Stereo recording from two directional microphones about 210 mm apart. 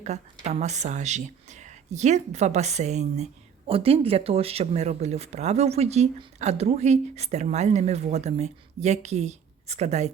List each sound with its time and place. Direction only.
0.0 s speech: 30° right (ahead or behind)